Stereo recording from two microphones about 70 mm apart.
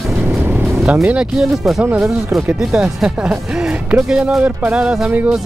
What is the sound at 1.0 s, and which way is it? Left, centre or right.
Speech, centre.